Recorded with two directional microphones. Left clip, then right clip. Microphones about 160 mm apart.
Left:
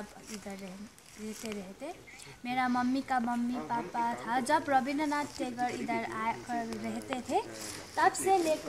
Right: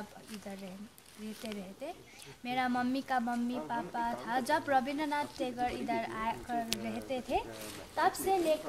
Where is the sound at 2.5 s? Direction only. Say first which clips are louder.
Left 2 dB; 25° right (ahead or behind).